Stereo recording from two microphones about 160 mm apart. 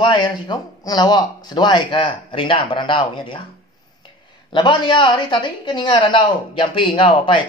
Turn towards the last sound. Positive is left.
turn(degrees=30)  # may be behind; listen again after turning